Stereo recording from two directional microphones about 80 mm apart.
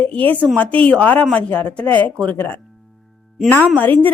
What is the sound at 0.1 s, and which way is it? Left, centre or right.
A woman's voice, centre.